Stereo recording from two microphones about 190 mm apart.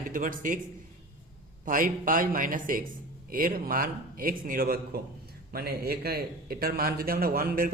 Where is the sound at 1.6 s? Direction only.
45° right (ahead or behind).